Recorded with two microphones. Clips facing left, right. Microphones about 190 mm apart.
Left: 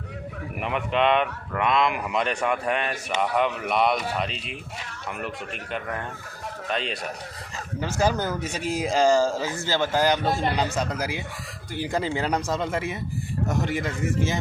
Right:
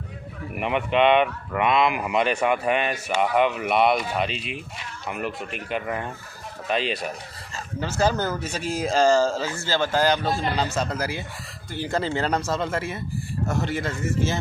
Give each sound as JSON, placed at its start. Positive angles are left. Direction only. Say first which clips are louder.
{"t": 0.6, "sound": "speech", "louder": "right 3 dB", "side_deg": 0}
{"t": 7.8, "sound": "speech", "louder": "right 1 dB", "side_deg": 15}